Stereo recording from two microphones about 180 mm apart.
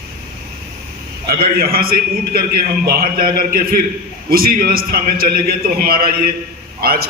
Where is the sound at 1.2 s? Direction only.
55° right (ahead or behind).